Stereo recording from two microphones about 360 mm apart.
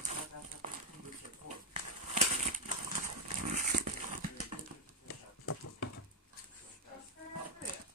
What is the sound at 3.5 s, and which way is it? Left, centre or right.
Dog, right.